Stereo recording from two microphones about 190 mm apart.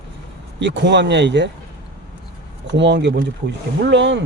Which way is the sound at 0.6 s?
65° right (ahead or behind).